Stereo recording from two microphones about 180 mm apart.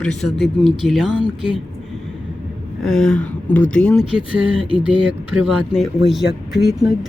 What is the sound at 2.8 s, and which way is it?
Speech, 5° left (ahead or behind).